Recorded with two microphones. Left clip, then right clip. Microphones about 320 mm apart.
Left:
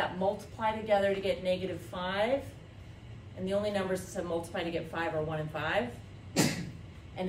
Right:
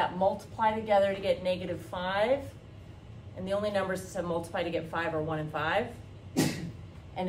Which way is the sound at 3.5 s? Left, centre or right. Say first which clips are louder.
Right 1 dB; centre.